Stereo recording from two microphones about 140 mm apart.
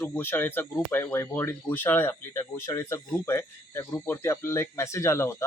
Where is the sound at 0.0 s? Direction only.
15° left (ahead or behind).